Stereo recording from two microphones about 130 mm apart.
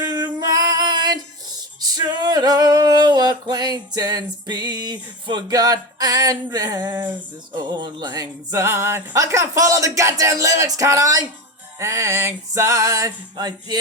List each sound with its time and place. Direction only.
0.3 s music: 30° right (ahead or behind)
7.5 s speech: 35° right (ahead or behind)